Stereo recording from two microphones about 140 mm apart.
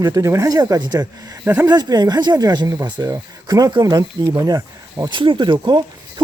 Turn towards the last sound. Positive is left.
turn(degrees=-35)  # may be behind; listen again after turning